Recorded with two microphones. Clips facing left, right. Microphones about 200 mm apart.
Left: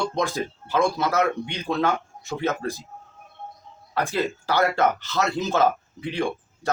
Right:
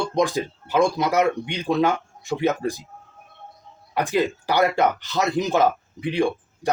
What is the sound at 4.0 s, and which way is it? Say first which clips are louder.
Speech: right 3 dB; 15° right (ahead or behind).